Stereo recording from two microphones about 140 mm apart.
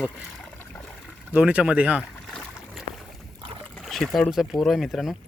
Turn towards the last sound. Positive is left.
turn(degrees=0)  # may be behind; listen again after turning